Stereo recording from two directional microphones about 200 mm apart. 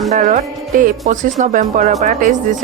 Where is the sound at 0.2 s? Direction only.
40° right (ahead or behind).